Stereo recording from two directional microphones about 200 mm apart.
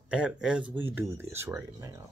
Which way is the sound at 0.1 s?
5° right (ahead or behind).